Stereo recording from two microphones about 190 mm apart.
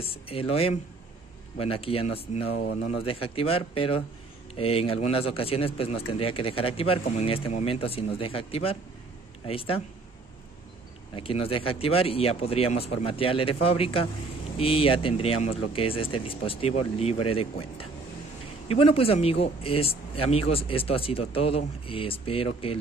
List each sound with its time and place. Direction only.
0.0 s speech: 30° left (ahead or behind)
11.1 s speech: 30° left (ahead or behind)